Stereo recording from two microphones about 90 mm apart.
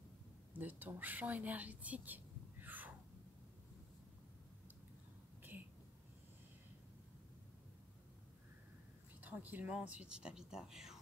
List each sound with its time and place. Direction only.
0.5 s speech: 20° right (ahead or behind)
9.2 s speech: 20° right (ahead or behind)